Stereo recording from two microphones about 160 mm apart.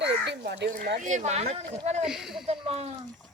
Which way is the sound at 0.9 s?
50° right (ahead or behind).